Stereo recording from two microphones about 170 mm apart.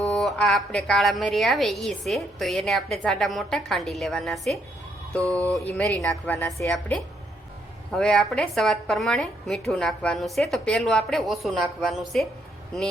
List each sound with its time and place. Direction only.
0.0 s a woman's voice: centre (ahead or behind)
5.7 s speech: 10° left (ahead or behind)
6.7 s a woman's voice: 5° left (ahead or behind)